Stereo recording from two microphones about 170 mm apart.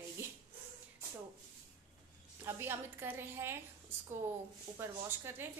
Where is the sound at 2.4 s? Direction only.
15° right (ahead or behind).